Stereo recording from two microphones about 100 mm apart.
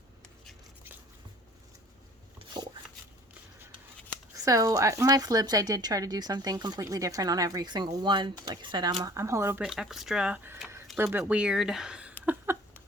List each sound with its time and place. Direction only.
4.4 s speech: 35° right (ahead or behind)
9.1 s speech: 30° right (ahead or behind)
9.6 s speech: 5° right (ahead or behind)
10.9 s speech: 20° right (ahead or behind)
11.3 s speech: 5° right (ahead or behind)
12.2 s a sound: 20° right (ahead or behind)